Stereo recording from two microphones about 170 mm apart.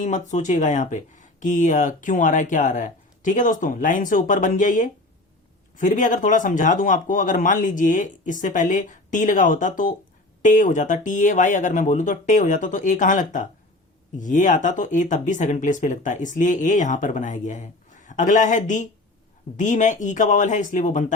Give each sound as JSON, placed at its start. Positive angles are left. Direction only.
{"t": 0.0, "sound": "speech", "side_deg": 45}